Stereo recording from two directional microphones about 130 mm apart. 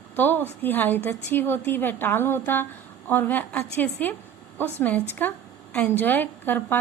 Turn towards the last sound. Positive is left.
turn(degrees=15)  # may be behind; listen again after turning